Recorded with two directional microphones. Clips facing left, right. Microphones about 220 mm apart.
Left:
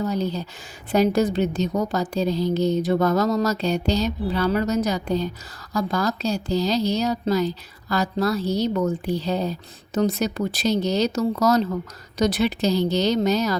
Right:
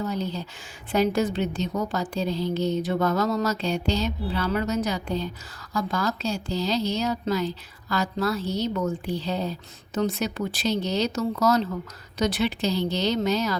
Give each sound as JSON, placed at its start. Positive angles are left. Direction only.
{"t": 0.0, "sound": "a woman's voice", "side_deg": 40}